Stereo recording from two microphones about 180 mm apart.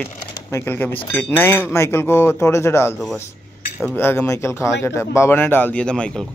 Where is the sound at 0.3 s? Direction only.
15° left (ahead or behind).